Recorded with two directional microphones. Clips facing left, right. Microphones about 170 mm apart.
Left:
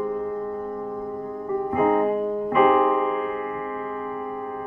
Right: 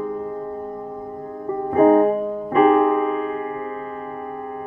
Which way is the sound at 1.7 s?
35° right (ahead or behind).